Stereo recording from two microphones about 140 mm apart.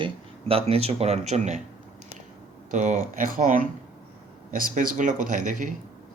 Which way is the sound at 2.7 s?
60° right (ahead or behind).